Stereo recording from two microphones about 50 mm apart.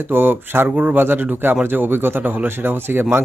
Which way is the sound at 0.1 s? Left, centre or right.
Right.